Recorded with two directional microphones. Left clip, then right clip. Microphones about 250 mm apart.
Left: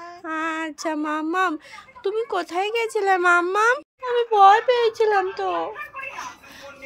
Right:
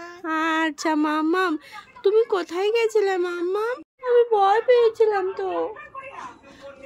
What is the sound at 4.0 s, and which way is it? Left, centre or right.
Speech, centre.